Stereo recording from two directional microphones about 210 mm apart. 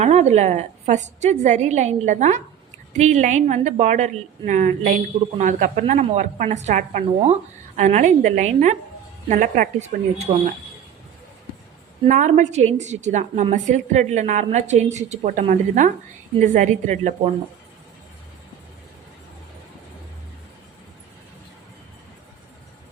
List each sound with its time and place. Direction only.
0.0 s a woman's voice: 30° right (ahead or behind)
12.0 s a woman's voice: 35° right (ahead or behind)